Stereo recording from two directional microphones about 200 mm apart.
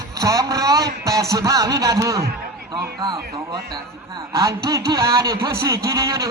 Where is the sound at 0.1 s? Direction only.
15° right (ahead or behind).